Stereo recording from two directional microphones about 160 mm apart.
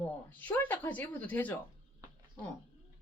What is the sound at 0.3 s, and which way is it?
A woman's voice, 10° left (ahead or behind).